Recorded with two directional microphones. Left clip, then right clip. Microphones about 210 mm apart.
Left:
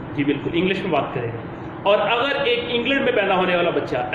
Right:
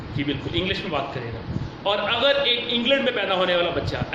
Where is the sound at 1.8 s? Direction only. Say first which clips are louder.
Left 3 dB; 20° right (ahead or behind).